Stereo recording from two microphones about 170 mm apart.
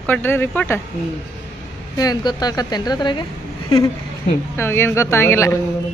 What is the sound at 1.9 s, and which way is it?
A woman's voice, 20° left (ahead or behind).